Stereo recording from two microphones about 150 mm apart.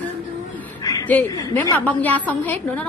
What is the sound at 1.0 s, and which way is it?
A woman's voice, 15° left (ahead or behind).